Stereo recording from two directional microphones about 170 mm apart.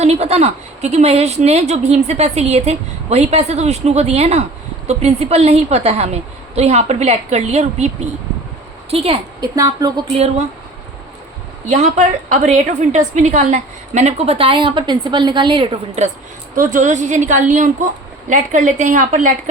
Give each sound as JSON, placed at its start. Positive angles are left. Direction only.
{"t": 0.0, "sound": "a woman's voice", "side_deg": -40}
{"t": 8.9, "sound": "a woman's voice", "side_deg": -35}
{"t": 9.4, "sound": "a woman's voice", "side_deg": -20}
{"t": 11.7, "sound": "a woman's voice", "side_deg": -40}
{"t": 16.6, "sound": "a woman's voice", "side_deg": -50}